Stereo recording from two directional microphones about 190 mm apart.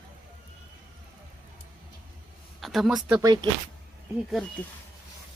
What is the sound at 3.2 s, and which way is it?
Speech, 20° right (ahead or behind).